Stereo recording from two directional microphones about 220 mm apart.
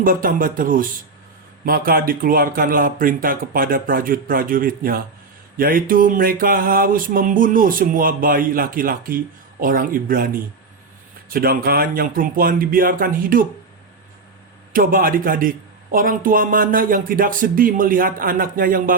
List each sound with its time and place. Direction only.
0.0 s mantra: 40° right (ahead or behind)
11.3 s mantra: 40° right (ahead or behind)
14.7 s mantra: 40° right (ahead or behind)